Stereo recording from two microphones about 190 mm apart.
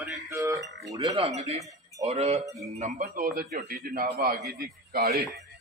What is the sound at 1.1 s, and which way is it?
A man's voice, 35° right (ahead or behind).